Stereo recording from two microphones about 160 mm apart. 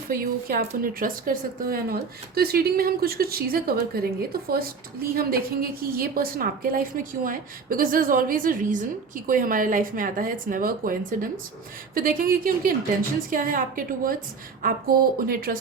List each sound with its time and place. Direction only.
0.1 s a woman's voice: 65° right (ahead or behind)
5.8 s a woman's voice: 65° right (ahead or behind)